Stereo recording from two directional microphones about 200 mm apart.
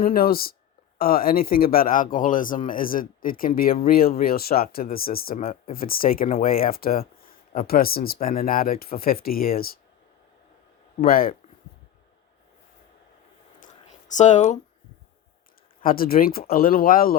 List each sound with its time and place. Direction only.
0.0 s speech: 50° left (ahead or behind)
11.0 s speech: 45° left (ahead or behind)
14.1 s speech: 35° left (ahead or behind)
15.8 s speech: 45° left (ahead or behind)